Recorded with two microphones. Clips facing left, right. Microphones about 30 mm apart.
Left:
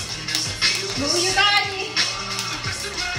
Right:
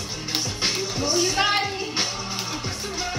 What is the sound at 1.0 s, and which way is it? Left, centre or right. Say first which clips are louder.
Music: left 2 dB; left.